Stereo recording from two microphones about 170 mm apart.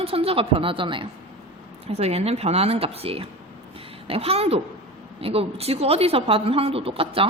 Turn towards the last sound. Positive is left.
turn(degrees=-35)  # may be behind; listen again after turning